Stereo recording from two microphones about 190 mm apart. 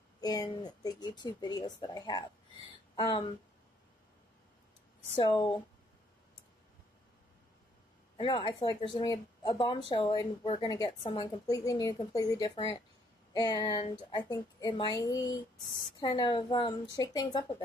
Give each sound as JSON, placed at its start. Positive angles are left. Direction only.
{"t": 0.2, "sound": "speech", "side_deg": 20}
{"t": 5.1, "sound": "speech", "side_deg": 25}
{"t": 8.2, "sound": "speech", "side_deg": 25}